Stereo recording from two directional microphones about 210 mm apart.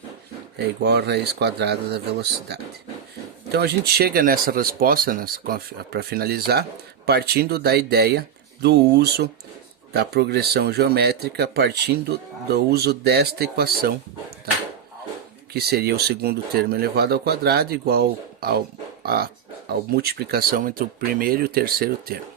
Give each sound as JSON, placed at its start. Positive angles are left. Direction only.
{"t": 0.8, "sound": "speech", "side_deg": -50}
{"t": 15.5, "sound": "speech", "side_deg": -50}